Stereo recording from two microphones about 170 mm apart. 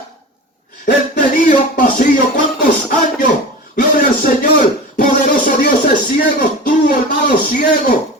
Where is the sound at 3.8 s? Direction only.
50° left (ahead or behind).